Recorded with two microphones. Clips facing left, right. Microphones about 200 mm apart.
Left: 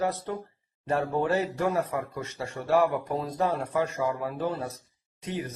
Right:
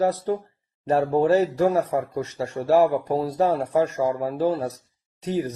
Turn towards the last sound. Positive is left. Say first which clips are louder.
# right 8 dB
turn(degrees=-35)  # may be behind; listen again after turning